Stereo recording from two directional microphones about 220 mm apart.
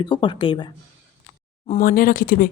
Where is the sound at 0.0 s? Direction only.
20° left (ahead or behind).